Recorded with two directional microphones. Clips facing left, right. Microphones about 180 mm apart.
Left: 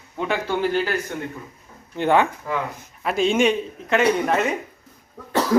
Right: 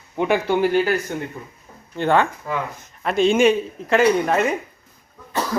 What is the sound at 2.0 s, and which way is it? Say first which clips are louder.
Speech: even; 15° left (ahead or behind).